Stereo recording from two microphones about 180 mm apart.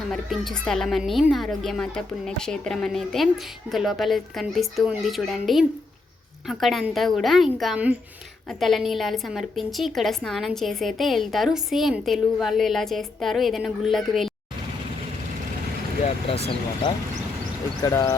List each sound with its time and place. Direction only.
0.1 s a woman's voice: centre (ahead or behind)
17.8 s speech: 20° left (ahead or behind)